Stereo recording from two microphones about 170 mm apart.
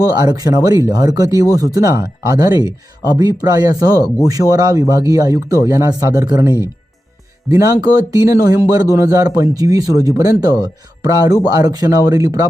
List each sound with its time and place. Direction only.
0.0 s speech: 20° right (ahead or behind)
7.5 s speech: 20° right (ahead or behind)